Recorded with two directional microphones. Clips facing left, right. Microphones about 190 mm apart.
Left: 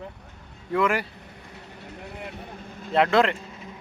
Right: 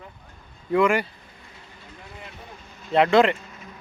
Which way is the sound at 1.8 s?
65° left (ahead or behind).